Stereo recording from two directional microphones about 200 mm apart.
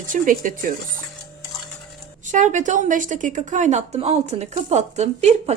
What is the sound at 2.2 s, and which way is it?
Speech, 40° right (ahead or behind).